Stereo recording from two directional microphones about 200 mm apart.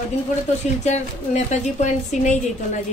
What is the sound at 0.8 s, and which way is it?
A woman's voice, 35° left (ahead or behind).